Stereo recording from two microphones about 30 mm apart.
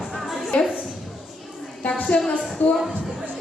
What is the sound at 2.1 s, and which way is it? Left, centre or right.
Speech, left.